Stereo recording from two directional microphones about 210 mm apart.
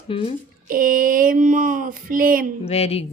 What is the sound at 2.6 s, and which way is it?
Speech, 30° left (ahead or behind).